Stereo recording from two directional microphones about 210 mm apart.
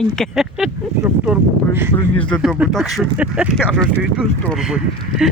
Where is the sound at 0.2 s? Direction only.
Centre (ahead or behind).